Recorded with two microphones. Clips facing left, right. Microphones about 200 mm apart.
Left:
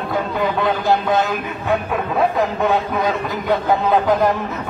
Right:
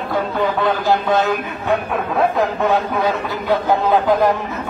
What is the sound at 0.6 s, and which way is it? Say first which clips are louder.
A man's voice: left 1 dB; centre (ahead or behind).